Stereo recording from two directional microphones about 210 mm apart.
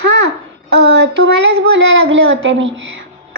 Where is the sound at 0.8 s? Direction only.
55° right (ahead or behind).